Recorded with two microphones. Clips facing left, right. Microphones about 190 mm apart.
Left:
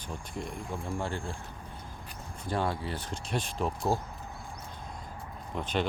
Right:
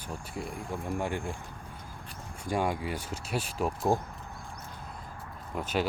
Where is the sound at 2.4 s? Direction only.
15° right (ahead or behind).